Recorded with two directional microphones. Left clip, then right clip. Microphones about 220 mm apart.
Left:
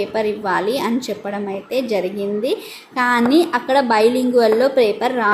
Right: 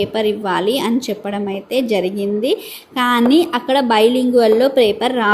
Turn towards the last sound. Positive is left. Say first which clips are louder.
# right 2 dB
turn(degrees=-30)  # may be behind; listen again after turning